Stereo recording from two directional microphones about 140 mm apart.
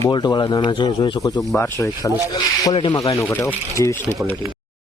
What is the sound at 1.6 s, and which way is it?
Speech, 20° left (ahead or behind).